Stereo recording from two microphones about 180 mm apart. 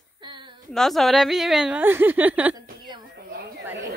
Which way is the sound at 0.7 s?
Centre (ahead or behind).